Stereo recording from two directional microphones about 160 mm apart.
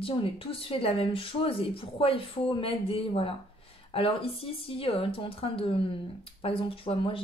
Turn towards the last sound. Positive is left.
turn(degrees=35)  # may be behind; listen again after turning